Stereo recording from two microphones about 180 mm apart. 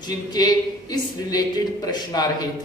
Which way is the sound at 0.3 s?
20° left (ahead or behind).